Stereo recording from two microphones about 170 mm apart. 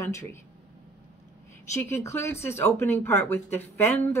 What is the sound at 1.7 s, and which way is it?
Speech, 15° left (ahead or behind).